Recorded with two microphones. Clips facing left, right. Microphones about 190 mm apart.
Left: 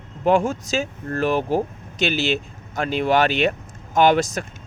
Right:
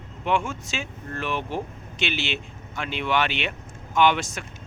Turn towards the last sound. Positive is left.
turn(degrees=40)  # may be behind; listen again after turning